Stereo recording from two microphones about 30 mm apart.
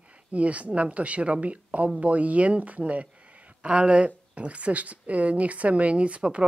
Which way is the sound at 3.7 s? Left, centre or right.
Right.